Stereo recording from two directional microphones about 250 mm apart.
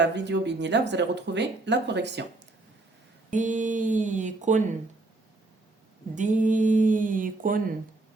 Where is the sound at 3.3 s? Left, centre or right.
Right.